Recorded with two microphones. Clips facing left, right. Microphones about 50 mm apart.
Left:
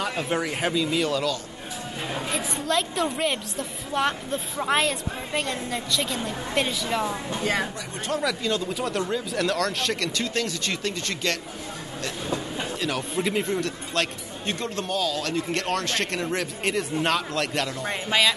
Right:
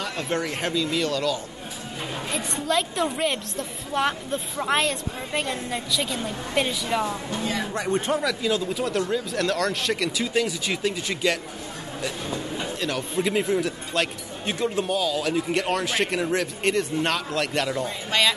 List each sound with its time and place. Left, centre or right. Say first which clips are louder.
0.0 s a woman's voice: left 1 dB; centre
7.7 s speech: right 11 dB; right
8.2 s a woman's voice: right 1 dB; centre
12.8 s a woman's voice: right 1 dB; centre
18.1 s speech: even; centre